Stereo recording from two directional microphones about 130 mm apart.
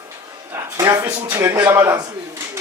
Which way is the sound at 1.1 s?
15° right (ahead or behind).